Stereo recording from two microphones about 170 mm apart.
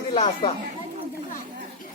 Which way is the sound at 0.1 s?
35° left (ahead or behind).